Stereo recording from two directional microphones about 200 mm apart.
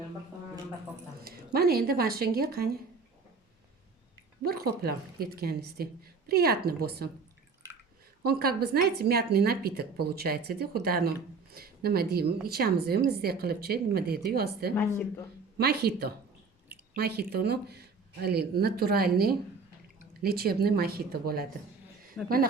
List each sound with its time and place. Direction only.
1.5 s a woman's voice: 50° right (ahead or behind)
4.4 s a woman's voice: 50° right (ahead or behind)
8.2 s a woman's voice: 50° right (ahead or behind)
14.8 s speech: 10° left (ahead or behind)
15.5 s a woman's voice: 55° right (ahead or behind)
22.2 s speech: 5° left (ahead or behind)